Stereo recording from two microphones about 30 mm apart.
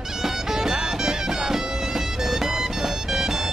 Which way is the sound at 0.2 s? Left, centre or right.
Centre.